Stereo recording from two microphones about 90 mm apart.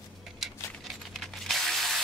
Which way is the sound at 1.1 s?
Centre (ahead or behind).